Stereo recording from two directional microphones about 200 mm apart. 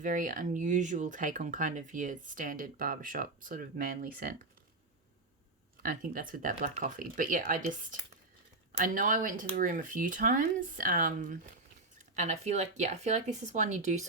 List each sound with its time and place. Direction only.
0.0 s speech: 40° right (ahead or behind)
5.8 s speech: 45° right (ahead or behind)